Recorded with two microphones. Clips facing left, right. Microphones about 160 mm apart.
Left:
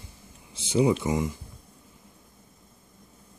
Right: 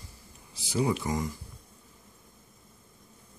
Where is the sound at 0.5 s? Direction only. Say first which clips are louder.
Left 6 dB; 20° left (ahead or behind).